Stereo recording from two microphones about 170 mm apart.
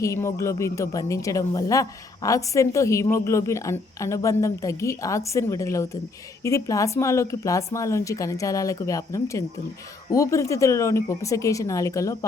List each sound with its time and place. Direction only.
0.0 s a woman's voice: 15° left (ahead or behind)